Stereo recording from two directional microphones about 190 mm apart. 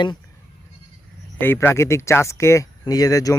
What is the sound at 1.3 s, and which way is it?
Speech, 10° left (ahead or behind).